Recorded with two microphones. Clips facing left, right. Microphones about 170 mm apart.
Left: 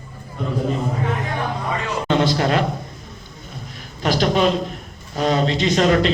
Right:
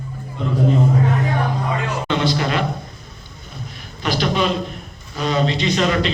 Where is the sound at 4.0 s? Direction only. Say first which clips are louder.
Left 2 dB; 40° left (ahead or behind).